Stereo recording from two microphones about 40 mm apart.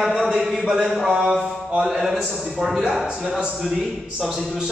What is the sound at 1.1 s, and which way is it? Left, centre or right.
Speech, centre.